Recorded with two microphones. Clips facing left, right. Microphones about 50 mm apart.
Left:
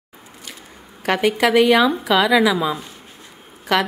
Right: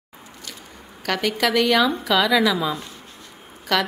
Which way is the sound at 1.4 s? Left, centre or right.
Centre.